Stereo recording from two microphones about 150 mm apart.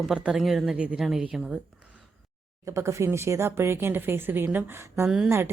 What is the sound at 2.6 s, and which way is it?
Speech, 20° right (ahead or behind).